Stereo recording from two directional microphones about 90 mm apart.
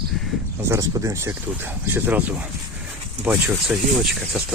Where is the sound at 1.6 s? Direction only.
20° right (ahead or behind).